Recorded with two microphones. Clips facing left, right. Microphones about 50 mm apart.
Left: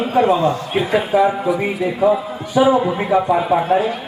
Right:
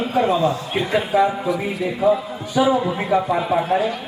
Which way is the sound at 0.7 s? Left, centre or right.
Centre.